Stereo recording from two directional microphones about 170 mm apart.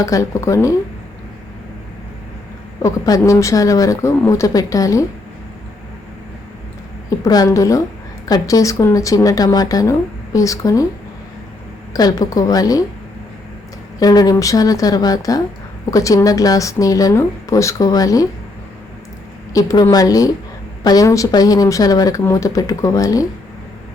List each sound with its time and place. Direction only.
0.0 s speech: 20° left (ahead or behind)
2.8 s speech: 20° left (ahead or behind)
7.3 s speech: 20° left (ahead or behind)
11.9 s speech: 20° left (ahead or behind)
14.0 s speech: 20° left (ahead or behind)
19.5 s speech: 20° left (ahead or behind)